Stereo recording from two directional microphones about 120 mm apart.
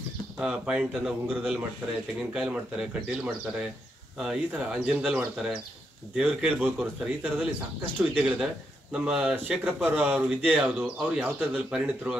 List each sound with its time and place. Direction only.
0.4 s speech: 5° right (ahead or behind)